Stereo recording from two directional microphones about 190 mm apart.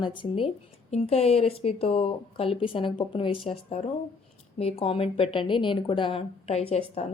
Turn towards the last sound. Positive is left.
turn(degrees=35)  # may be behind; listen again after turning